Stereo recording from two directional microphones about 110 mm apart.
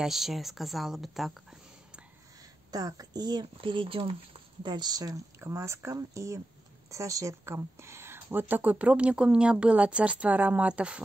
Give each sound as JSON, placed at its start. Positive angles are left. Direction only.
{"t": 0.0, "sound": "speech", "side_deg": -5}
{"t": 2.7, "sound": "speech", "side_deg": -35}
{"t": 4.6, "sound": "a woman's voice", "side_deg": -40}